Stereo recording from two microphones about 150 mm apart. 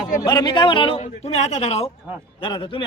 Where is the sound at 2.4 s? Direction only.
30° left (ahead or behind).